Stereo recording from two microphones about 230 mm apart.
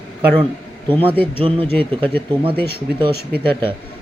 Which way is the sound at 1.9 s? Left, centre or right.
Right.